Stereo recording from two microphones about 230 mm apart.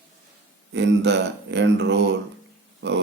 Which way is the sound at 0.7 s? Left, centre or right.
Right.